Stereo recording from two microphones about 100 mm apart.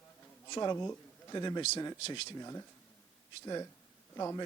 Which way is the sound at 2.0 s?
90° left.